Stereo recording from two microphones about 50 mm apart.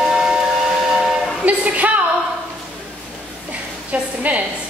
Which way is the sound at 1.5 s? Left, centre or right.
Right.